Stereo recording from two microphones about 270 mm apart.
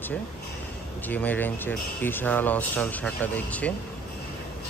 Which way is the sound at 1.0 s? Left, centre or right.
Centre.